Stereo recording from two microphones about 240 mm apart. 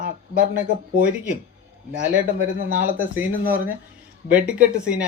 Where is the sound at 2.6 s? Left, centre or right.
Right.